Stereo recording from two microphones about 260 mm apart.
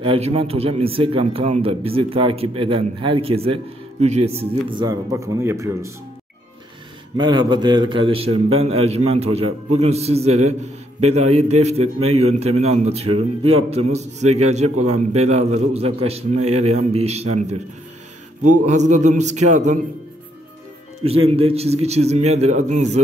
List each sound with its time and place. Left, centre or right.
0.0 s a man's voice: right
7.2 s a man's voice: centre
21.3 s a man's voice: right